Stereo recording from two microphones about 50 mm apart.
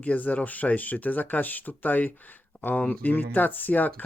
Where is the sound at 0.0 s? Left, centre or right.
Left.